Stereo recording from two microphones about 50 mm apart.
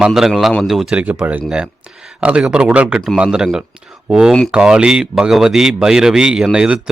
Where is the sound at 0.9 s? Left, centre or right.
Right.